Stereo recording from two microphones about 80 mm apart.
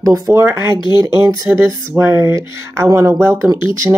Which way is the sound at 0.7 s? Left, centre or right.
Left.